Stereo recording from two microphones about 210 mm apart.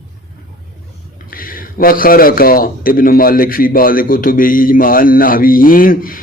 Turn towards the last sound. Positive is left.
turn(degrees=40)  # may be behind; listen again after turning